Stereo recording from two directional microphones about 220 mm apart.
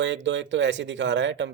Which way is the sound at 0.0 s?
55° right (ahead or behind).